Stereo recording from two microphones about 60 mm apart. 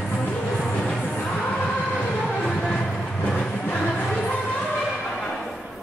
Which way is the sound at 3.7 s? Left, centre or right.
Centre.